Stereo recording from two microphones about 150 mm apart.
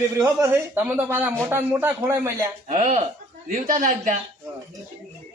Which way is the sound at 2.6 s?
50° right (ahead or behind).